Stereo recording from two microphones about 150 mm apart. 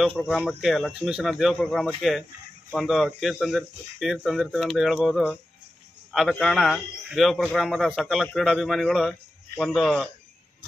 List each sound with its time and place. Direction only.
0.0 s speech: 5° left (ahead or behind)
0.5 s speech: centre (ahead or behind)
6.4 s speech: centre (ahead or behind)